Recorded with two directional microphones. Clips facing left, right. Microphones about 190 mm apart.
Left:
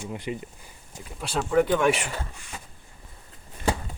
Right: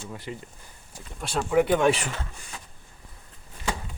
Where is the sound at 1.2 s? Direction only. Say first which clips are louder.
Even; centre (ahead or behind); by 1.9 s 15° right (ahead or behind).